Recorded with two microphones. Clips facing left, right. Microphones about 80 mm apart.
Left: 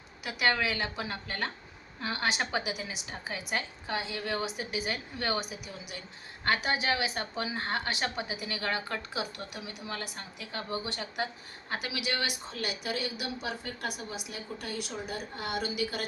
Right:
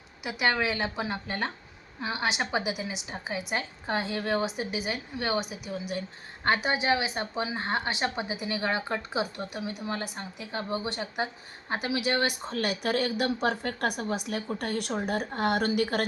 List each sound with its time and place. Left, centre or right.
0.3 s a woman's voice: centre
3.9 s a woman's voice: right